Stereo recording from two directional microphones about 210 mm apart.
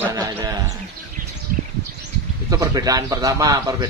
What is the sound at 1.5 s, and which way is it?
Bird, 40° right (ahead or behind).